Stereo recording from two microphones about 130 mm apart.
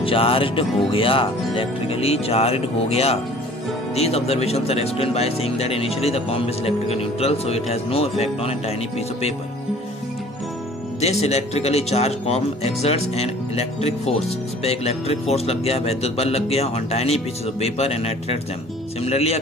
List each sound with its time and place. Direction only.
0.0 s speech: 45° left (ahead or behind)
11.0 s speech: 55° left (ahead or behind)